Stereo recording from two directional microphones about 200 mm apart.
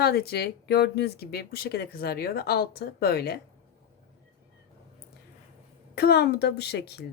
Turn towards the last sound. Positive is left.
turn(degrees=55)  # may be behind; listen again after turning